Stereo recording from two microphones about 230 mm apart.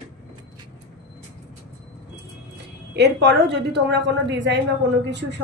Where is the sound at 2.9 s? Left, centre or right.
Right.